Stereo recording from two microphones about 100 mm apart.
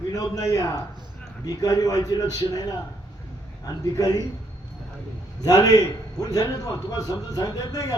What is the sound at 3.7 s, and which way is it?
Speech, 40° left (ahead or behind).